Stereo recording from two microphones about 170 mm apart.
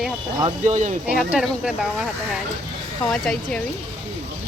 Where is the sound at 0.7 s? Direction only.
45° right (ahead or behind).